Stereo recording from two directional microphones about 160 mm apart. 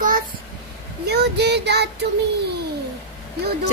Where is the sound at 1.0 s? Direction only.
90° right.